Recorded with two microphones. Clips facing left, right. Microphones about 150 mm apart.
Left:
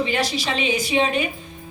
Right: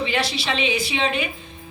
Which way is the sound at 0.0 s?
45° left (ahead or behind).